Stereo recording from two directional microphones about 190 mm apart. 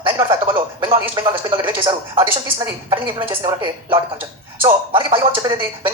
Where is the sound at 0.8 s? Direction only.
25° right (ahead or behind).